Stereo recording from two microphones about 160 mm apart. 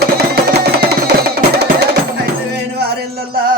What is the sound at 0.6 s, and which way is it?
Music, 80° right.